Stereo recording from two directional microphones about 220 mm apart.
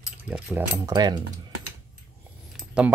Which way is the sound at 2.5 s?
5° right (ahead or behind).